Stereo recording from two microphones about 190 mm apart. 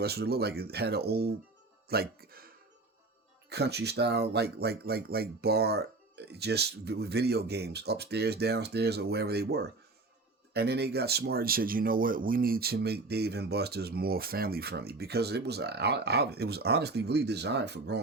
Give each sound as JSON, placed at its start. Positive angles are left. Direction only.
{"t": 0.0, "sound": "speech", "side_deg": -55}
{"t": 3.5, "sound": "speech", "side_deg": -60}